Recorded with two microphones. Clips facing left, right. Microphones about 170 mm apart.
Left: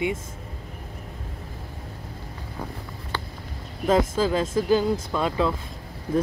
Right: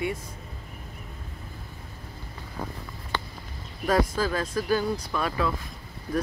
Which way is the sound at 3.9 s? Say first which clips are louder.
Left 3 dB; 20° left (ahead or behind).